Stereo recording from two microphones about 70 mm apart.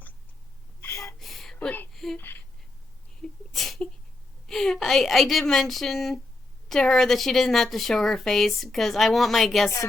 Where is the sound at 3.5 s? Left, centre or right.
Centre.